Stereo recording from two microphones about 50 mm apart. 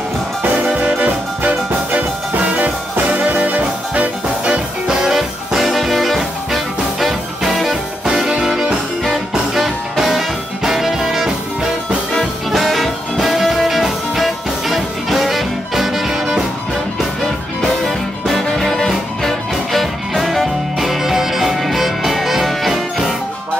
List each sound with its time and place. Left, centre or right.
0.7 s music: right
4.8 s music: centre
17.6 s music: centre